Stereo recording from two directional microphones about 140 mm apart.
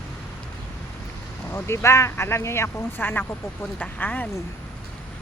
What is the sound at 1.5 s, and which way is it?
Speech, 20° left (ahead or behind).